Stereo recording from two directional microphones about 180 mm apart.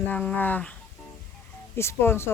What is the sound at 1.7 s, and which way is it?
Speech, 15° left (ahead or behind).